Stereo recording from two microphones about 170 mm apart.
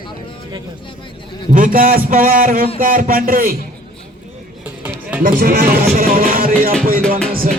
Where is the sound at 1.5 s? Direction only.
55° right (ahead or behind).